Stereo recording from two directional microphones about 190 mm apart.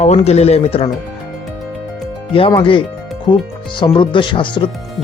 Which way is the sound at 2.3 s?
30° left (ahead or behind).